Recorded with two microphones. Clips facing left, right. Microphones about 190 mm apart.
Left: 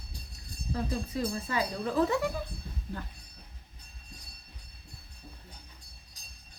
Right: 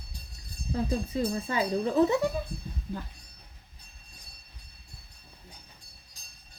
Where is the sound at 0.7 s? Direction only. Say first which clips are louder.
Right 3 dB; 25° right (ahead or behind).